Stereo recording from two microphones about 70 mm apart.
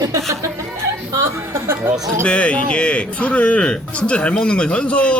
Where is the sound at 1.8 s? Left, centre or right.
Right.